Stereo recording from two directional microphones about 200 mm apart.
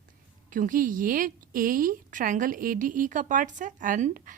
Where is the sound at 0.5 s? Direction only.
40° right (ahead or behind).